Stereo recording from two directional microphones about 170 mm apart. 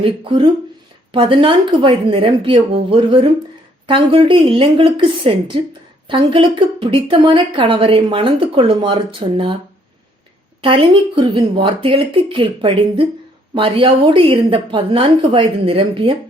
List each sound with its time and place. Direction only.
0.0 s a woman's voice: 30° right (ahead or behind)
10.6 s a woman's voice: 30° right (ahead or behind)